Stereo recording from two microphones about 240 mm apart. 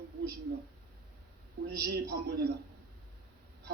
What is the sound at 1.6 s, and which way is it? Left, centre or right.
Speech, right.